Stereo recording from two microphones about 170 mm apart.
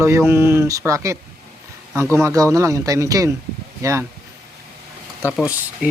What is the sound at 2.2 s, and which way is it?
Speech, 15° right (ahead or behind).